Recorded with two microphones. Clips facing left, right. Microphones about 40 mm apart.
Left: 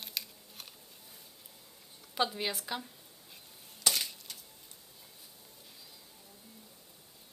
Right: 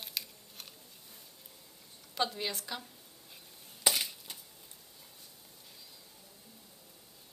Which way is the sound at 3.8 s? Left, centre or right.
Centre.